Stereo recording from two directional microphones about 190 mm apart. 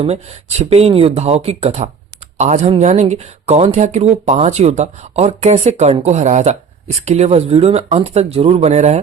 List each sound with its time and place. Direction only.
0.0 s speech: 35° right (ahead or behind)